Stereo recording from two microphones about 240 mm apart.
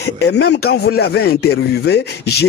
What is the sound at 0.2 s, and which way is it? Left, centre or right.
Speech, left.